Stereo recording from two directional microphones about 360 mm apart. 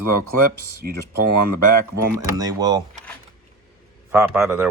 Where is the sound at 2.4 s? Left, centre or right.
Centre.